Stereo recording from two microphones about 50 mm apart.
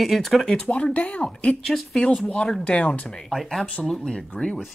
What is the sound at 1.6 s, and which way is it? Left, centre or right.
Speech, centre.